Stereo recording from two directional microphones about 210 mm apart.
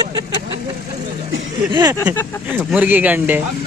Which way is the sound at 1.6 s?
20° right (ahead or behind).